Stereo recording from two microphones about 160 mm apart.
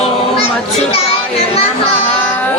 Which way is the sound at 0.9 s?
40° left (ahead or behind).